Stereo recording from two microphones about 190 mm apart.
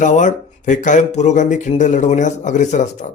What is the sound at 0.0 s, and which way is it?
Speech, 40° left (ahead or behind).